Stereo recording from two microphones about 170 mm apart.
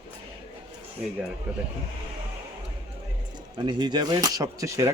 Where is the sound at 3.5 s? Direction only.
25° right (ahead or behind).